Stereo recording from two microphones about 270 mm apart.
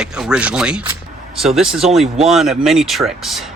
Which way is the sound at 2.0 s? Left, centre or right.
Right.